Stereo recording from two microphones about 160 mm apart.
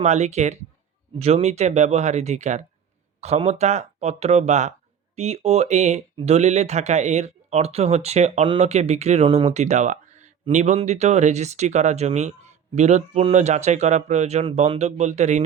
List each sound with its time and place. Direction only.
0.0 s speech: 45° right (ahead or behind)